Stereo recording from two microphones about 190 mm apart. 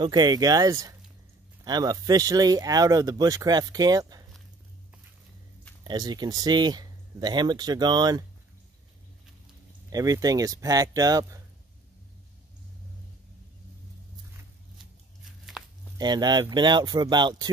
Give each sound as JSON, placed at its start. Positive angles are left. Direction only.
{"t": 0.0, "sound": "speech", "side_deg": -20}
{"t": 5.9, "sound": "speech", "side_deg": -20}
{"t": 9.8, "sound": "speech", "side_deg": -20}
{"t": 16.0, "sound": "speech", "side_deg": -20}